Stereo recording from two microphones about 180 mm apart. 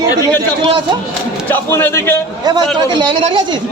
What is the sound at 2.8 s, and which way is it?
Speech, 25° right (ahead or behind).